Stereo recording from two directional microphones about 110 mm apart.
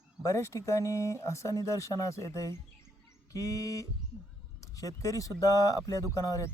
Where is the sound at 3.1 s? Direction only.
30° left (ahead or behind).